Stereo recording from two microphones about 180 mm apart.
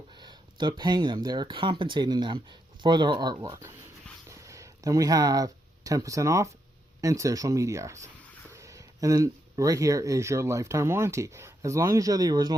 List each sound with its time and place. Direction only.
0.2 s speech: 25° right (ahead or behind)